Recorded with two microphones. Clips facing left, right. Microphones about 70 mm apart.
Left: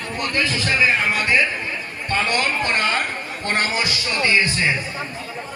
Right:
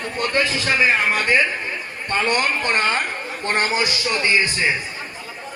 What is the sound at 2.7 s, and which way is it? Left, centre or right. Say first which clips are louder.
Speech: right 2 dB; centre.